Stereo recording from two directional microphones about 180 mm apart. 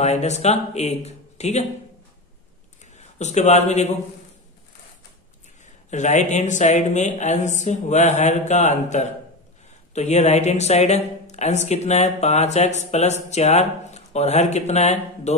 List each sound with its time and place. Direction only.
0.0 s speech: 40° left (ahead or behind)
3.2 s speech: 40° left (ahead or behind)
5.9 s speech: 40° left (ahead or behind)